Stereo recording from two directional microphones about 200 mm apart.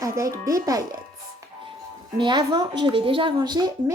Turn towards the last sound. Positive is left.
turn(degrees=-20)  # may be behind; listen again after turning